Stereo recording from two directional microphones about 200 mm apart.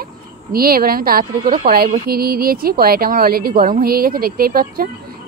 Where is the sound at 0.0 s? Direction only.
50° right (ahead or behind).